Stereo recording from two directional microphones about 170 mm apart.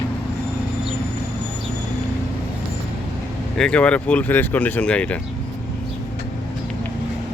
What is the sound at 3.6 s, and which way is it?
Speech, 5° left (ahead or behind).